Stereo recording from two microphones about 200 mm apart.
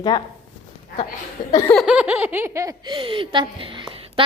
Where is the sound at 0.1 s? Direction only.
20° left (ahead or behind).